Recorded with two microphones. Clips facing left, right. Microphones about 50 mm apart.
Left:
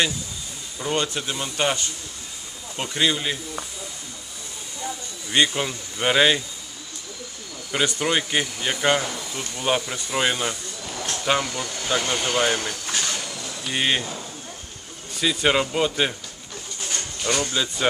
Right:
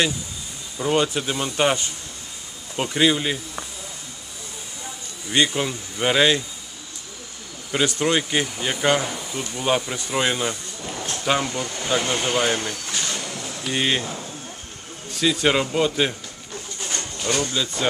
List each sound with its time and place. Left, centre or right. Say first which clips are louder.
0.7 s speech: right 4 dB; centre
5.3 s speech: even; centre
7.7 s speech: right 2 dB; centre
10.8 s a sound: right 1 dB; centre
11.1 s a sound: even; centre
11.4 s speech: right 2 dB; centre
13.3 s a sound: right 2 dB; right
13.7 s speech: right 1 dB; centre
15.1 s speech: right 1 dB; centre
17.3 s speech: even; centre